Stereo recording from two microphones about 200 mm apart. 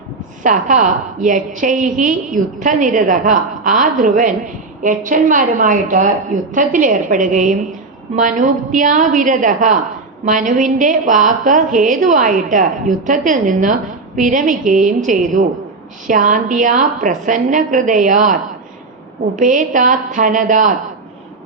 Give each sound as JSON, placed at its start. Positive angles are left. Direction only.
{"t": 0.4, "sound": "a woman's voice", "side_deg": -40}
{"t": 19.4, "sound": "a woman's voice", "side_deg": -40}